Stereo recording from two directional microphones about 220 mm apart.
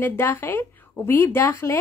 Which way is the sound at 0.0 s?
10° left (ahead or behind).